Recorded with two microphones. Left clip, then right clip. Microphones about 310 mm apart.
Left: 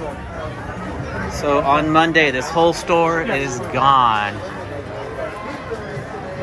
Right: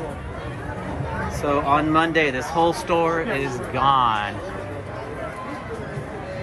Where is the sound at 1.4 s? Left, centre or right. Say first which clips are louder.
Left 4 dB; centre.